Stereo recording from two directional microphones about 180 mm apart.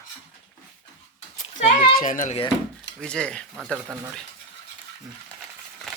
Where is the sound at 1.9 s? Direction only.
45° left (ahead or behind).